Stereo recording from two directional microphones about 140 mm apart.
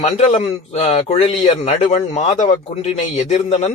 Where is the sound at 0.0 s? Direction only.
50° left (ahead or behind).